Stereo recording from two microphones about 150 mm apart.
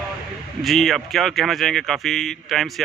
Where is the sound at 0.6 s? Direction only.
Centre (ahead or behind).